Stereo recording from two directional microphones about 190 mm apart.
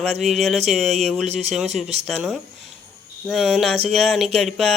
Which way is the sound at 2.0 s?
Centre (ahead or behind).